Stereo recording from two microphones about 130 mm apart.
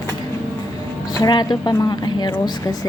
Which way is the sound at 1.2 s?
35° left (ahead or behind).